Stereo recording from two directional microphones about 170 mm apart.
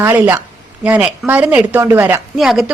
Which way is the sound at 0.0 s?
10° right (ahead or behind).